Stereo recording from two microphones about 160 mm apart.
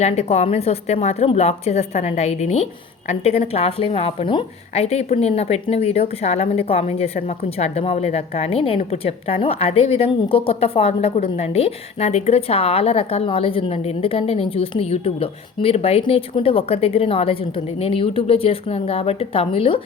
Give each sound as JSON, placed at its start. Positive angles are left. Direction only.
{"t": 0.0, "sound": "a woman's voice", "side_deg": 40}